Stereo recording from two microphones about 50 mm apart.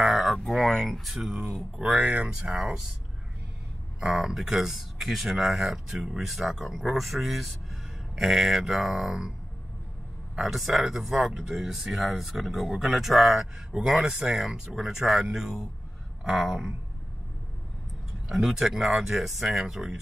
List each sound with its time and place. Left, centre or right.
0.0 s a sound: centre
1.0 s speech: centre
1.8 s speech: centre
4.0 s speech: centre
10.4 s speech: centre
18.3 s speech: centre